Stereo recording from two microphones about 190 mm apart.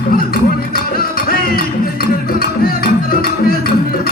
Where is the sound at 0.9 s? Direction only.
50° left (ahead or behind).